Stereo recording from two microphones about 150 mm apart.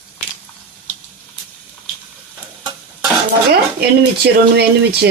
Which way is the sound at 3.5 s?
90° right.